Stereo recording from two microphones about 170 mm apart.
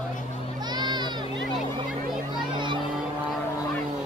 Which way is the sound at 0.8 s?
25° right (ahead or behind).